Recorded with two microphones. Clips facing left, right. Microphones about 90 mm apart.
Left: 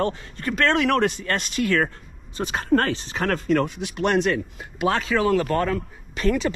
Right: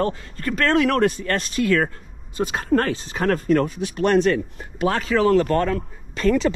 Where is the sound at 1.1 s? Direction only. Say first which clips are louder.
Right 2 dB; 40° right (ahead or behind).